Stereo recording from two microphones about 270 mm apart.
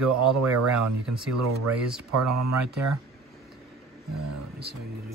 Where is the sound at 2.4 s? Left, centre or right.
Right.